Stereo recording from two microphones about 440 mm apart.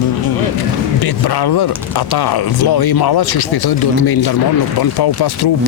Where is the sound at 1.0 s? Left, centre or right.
Left.